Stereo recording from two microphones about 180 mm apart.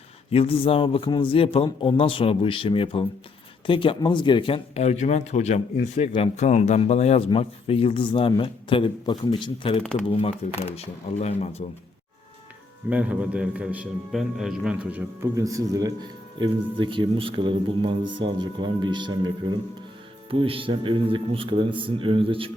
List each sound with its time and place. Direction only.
0.3 s a man's voice: 30° left (ahead or behind)
12.9 s a man's voice: 10° right (ahead or behind); by 22.5 s 30° right (ahead or behind)